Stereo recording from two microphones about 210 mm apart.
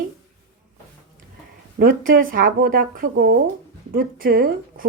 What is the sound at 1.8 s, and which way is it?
A woman's voice, 40° right (ahead or behind).